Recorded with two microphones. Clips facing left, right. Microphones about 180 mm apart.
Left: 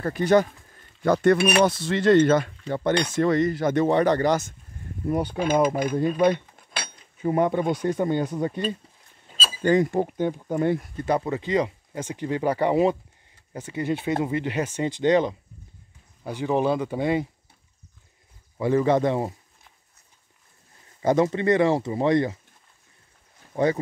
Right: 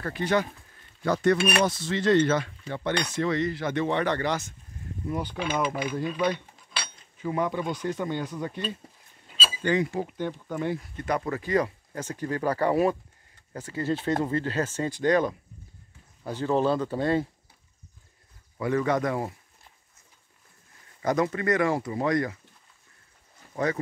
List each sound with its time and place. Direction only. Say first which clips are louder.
0.0 s speech: left 6 dB; 45° left (ahead or behind)
6.0 s cutlery: left 8 dB; 50° left (ahead or behind)
8.0 s speech: left 6 dB; 50° left (ahead or behind)
9.4 s speech: left 5 dB; 45° left (ahead or behind)
11.0 s speech: left 4 dB; 30° left (ahead or behind)
18.6 s speech: left 5 dB; 30° left (ahead or behind)
21.0 s speech: left 5 dB; 25° left (ahead or behind)
23.5 s speech: left 5 dB; 30° left (ahead or behind)